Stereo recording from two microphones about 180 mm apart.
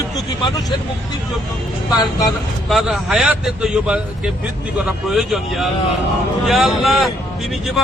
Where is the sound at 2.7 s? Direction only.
Centre (ahead or behind).